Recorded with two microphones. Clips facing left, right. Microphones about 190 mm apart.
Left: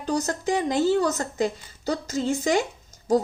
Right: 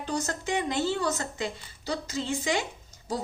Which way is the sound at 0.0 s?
40° left (ahead or behind).